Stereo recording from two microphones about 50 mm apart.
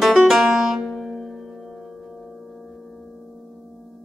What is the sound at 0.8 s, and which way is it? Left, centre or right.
Music, centre.